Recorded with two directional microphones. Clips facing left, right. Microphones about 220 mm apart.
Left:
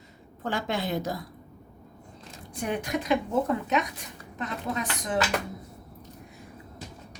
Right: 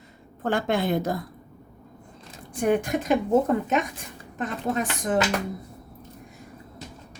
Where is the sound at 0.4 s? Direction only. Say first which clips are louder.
Right 6 dB; 55° right (ahead or behind).